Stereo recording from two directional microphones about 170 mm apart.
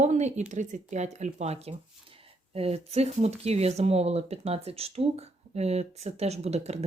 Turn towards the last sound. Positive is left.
turn(degrees=-40)  # may be behind; listen again after turning